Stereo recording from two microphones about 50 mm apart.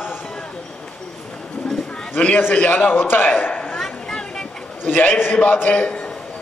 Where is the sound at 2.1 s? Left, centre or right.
Left.